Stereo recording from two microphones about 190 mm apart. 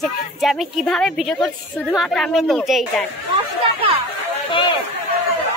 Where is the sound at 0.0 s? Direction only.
Centre (ahead or behind).